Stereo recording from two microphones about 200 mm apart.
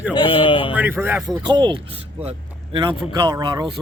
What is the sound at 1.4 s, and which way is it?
Speech, 20° right (ahead or behind).